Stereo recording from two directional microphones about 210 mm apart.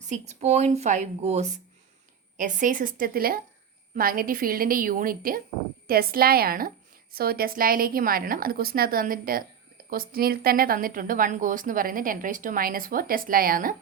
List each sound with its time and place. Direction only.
0.1 s a woman's voice: 30° right (ahead or behind)